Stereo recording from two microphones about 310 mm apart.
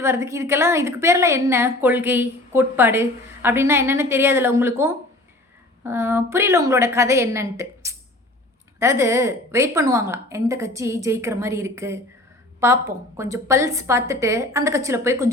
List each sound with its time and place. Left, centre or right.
0.0 s a woman's voice: centre